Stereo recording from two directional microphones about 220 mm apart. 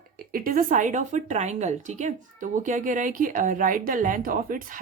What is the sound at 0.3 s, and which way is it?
A woman's voice, 40° right (ahead or behind).